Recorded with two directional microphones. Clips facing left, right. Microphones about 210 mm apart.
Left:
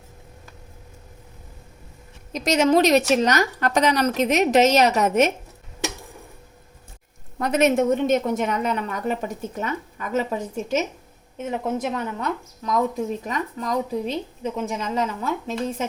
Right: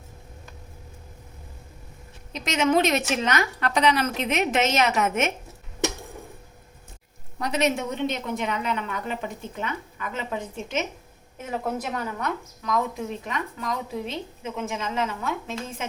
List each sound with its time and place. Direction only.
2.3 s speech: 40° left (ahead or behind)
7.3 s a woman's voice: 50° left (ahead or behind)
11.6 s speech: 25° left (ahead or behind)